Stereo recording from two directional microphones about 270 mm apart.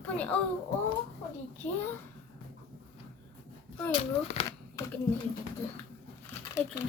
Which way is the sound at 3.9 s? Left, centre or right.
Left.